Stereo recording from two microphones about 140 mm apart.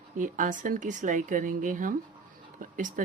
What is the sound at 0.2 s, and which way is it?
Speech, 70° right (ahead or behind).